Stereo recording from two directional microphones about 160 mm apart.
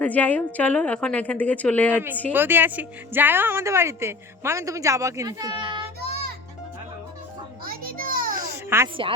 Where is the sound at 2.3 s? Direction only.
15° right (ahead or behind); by 5.8 s 30° right (ahead or behind).